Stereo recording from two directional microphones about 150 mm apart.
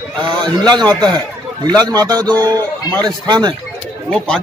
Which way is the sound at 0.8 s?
5° left (ahead or behind).